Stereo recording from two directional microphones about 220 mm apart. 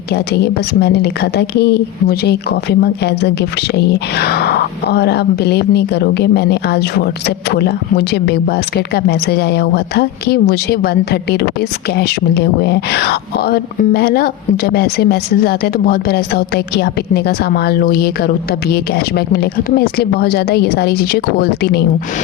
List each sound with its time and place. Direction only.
0.1 s speech: 50° left (ahead or behind)